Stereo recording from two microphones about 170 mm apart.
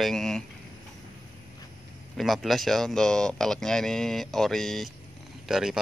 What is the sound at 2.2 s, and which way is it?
Speech, centre (ahead or behind).